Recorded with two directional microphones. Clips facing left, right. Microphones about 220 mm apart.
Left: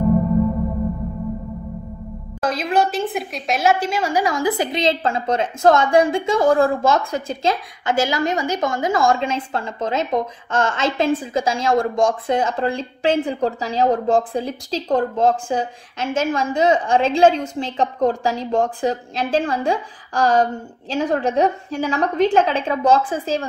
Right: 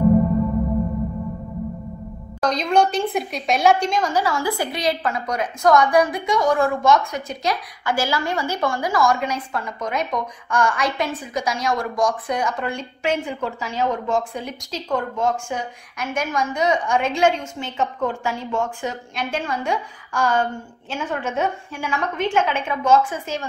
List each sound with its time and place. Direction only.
2.4 s a woman's voice: 5° left (ahead or behind); by 23.4 s 30° left (ahead or behind)